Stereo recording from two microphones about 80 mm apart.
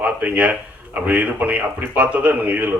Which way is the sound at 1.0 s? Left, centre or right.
Centre.